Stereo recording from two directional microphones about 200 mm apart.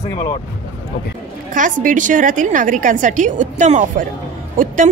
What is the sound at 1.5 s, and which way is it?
A woman's voice, 40° right (ahead or behind).